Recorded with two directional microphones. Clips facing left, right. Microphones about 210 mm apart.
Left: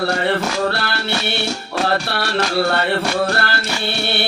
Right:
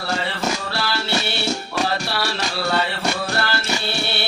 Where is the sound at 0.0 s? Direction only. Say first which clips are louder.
Left 6 dB; 60° left (ahead or behind).